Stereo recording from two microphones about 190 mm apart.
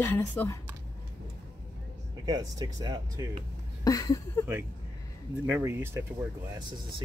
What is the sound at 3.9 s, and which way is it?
Speech, 20° left (ahead or behind).